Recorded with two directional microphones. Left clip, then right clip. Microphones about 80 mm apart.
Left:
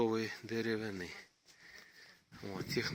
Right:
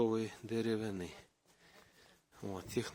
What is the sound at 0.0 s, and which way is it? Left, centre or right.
Speech, right.